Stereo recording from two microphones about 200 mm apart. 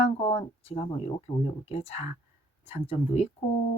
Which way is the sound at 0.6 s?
30° left (ahead or behind).